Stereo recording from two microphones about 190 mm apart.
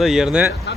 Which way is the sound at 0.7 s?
65° left (ahead or behind).